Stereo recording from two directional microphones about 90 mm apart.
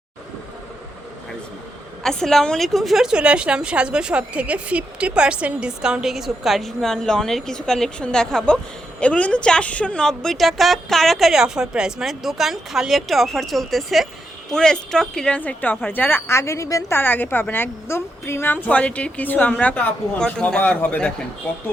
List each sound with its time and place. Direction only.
2.0 s a woman's voice: 5° left (ahead or behind)
15.4 s a woman's voice: 20° left (ahead or behind); by 16.8 s 35° left (ahead or behind)
16.9 s a woman's voice: 20° left (ahead or behind)